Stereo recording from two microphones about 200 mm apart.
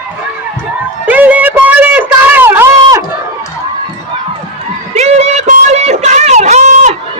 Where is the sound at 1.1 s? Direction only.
10° right (ahead or behind).